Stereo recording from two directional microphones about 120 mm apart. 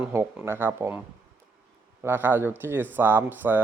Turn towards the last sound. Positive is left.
turn(degrees=-15)  # may be behind; listen again after turning